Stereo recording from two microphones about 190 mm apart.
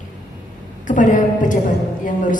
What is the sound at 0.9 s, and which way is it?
Speech, 45° left (ahead or behind).